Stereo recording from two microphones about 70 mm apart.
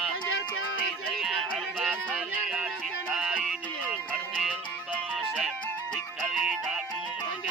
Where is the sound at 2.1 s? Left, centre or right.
Centre.